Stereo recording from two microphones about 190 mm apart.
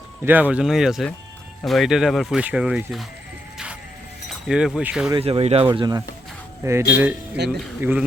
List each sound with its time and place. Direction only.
0.3 s speech: 10° right (ahead or behind)
4.3 s speech: 5° right (ahead or behind)
5.1 s speech: 30° right (ahead or behind); by 7.1 s 15° right (ahead or behind)
7.4 s speech: 60° right (ahead or behind)
7.8 s speech: 10° right (ahead or behind)